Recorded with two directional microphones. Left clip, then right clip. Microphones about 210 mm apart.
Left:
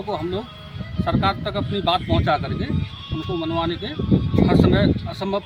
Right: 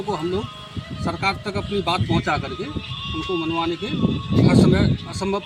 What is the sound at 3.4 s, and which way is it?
Speech, 10° left (ahead or behind).